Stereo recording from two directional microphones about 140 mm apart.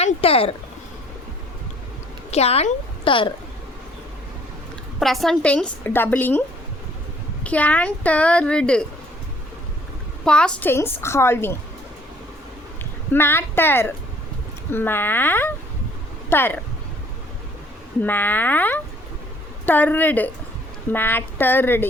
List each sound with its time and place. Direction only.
0.0 s speech: 45° left (ahead or behind)
2.3 s a woman's voice: 50° left (ahead or behind)
4.9 s a woman's voice: centre (ahead or behind)
7.4 s a woman's voice: 10° left (ahead or behind)
10.2 s a woman's voice: 5° left (ahead or behind)
13.1 s a woman's voice: 15° left (ahead or behind)
18.0 s a woman's voice: 15° left (ahead or behind)